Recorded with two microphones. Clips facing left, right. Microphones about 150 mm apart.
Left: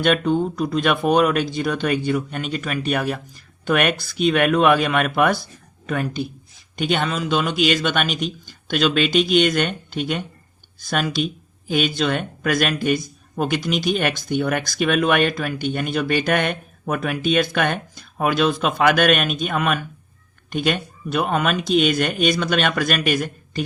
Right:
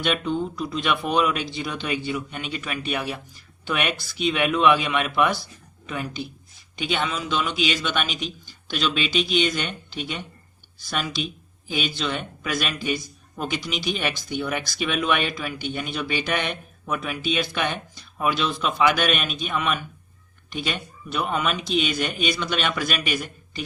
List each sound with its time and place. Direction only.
0.0 s speech: 45° left (ahead or behind)